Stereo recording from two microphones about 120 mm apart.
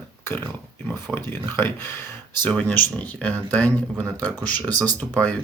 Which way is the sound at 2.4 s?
10° left (ahead or behind).